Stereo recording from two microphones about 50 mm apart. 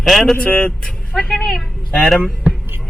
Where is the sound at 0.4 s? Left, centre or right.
Left.